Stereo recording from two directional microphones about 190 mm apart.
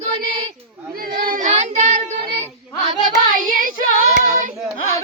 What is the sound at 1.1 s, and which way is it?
Child singing, 40° right (ahead or behind).